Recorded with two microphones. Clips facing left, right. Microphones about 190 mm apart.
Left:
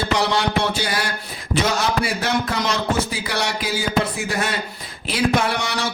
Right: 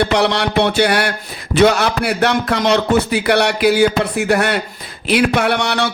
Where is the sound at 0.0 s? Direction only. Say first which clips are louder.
Right 5 dB; 70° right (ahead or behind).